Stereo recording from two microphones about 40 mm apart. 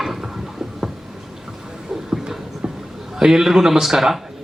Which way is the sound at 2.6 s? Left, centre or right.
Centre.